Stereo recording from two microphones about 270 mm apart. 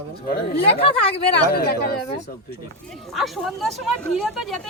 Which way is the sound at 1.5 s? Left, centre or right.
Left.